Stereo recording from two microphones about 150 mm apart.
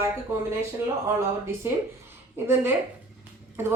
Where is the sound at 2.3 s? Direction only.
15° right (ahead or behind).